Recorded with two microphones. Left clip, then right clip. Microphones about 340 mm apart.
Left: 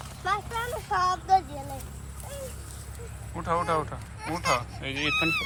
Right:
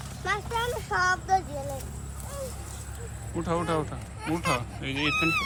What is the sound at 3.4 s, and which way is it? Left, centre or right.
Speech, centre.